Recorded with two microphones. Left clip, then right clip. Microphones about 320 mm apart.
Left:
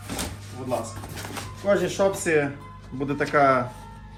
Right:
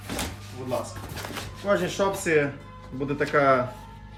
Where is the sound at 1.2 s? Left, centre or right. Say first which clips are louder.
Even; centre.